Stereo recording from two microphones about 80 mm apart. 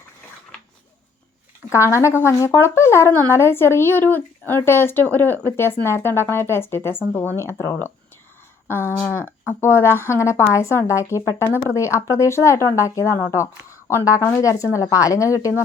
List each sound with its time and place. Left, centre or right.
1.7 s speech: left
14.2 s speech: left
14.4 s a woman's voice: left